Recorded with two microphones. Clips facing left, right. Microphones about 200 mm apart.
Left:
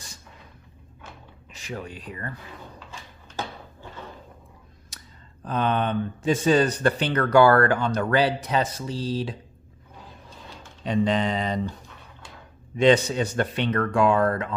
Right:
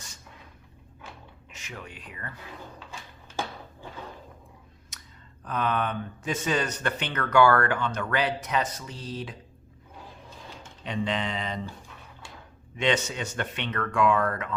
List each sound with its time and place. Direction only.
1.5 s speech: 35° left (ahead or behind)
2.7 s a sound: 5° right (ahead or behind)
4.9 s a sound: 35° left (ahead or behind)
5.4 s speech: 30° left (ahead or behind)
10.8 s speech: 40° left (ahead or behind)
12.7 s speech: 35° left (ahead or behind)